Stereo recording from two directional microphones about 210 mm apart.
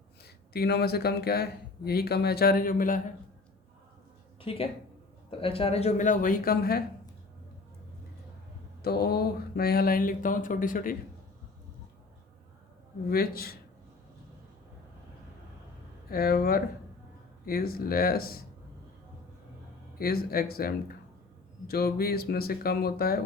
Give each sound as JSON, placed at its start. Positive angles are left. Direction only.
{"t": 0.5, "sound": "speech", "side_deg": 50}
{"t": 4.4, "sound": "speech", "side_deg": 25}
{"t": 8.8, "sound": "speech", "side_deg": 50}
{"t": 13.1, "sound": "speech", "side_deg": 45}
{"t": 16.0, "sound": "speech", "side_deg": 45}
{"t": 20.0, "sound": "speech", "side_deg": 45}